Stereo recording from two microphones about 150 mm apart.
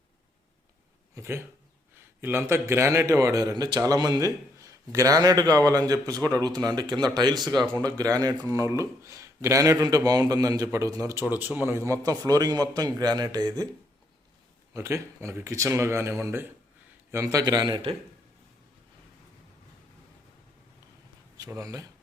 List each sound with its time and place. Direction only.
1.1 s speech: 15° right (ahead or behind)
14.7 s speech: 20° right (ahead or behind)
21.3 s speech: 25° right (ahead or behind)